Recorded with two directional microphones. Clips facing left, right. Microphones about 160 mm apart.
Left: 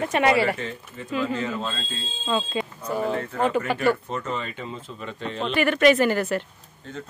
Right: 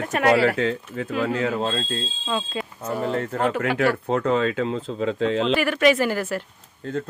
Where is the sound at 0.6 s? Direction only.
90° right; by 1.8 s 65° right (ahead or behind).